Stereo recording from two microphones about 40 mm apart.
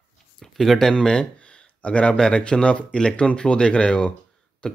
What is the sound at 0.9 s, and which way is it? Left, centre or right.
Speech, centre.